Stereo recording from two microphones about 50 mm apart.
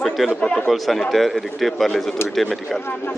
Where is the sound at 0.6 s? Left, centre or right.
Centre.